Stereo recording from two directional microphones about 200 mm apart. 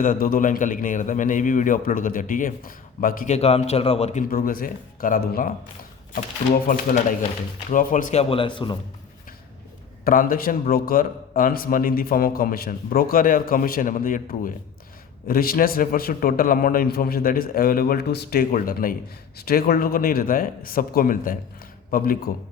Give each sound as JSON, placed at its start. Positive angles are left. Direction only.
{"t": 0.0, "sound": "a man's voice", "side_deg": 45}
{"t": 4.3, "sound": "a man's voice", "side_deg": 45}
{"t": 10.0, "sound": "a man's voice", "side_deg": 45}